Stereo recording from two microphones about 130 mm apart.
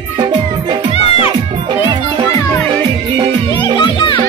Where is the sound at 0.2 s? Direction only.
35° right (ahead or behind).